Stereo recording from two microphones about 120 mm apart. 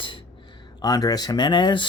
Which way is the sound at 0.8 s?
35° left (ahead or behind).